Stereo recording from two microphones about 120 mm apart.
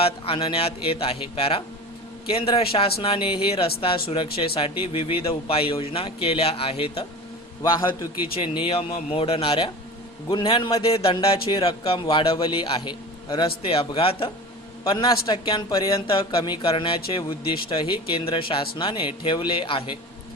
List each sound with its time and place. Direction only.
0.0 s speech: 50° left (ahead or behind)
7.6 s a man's voice: 25° left (ahead or behind)
8.4 s speech: 45° left (ahead or behind)
14.8 s a man's voice: 35° left (ahead or behind)
16.0 s speech: 45° left (ahead or behind)